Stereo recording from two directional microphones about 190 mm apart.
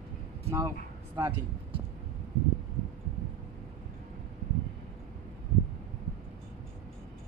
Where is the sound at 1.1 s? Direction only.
20° right (ahead or behind).